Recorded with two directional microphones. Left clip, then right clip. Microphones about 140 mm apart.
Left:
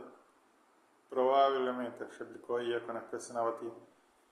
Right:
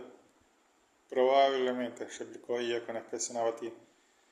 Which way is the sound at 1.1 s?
50° right (ahead or behind).